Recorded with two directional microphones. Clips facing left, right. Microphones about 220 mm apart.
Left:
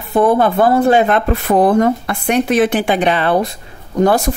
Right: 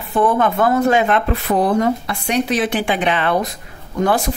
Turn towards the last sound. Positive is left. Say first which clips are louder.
# left 4 dB
turn(degrees=40)  # may be behind; listen again after turning